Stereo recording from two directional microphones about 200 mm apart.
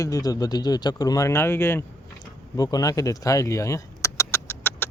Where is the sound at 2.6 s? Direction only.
20° left (ahead or behind).